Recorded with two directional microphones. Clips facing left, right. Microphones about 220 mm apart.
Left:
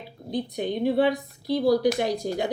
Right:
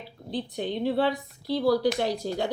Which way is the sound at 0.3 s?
15° left (ahead or behind).